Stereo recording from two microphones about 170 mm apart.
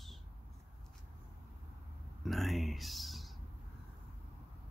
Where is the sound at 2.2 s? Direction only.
Centre (ahead or behind).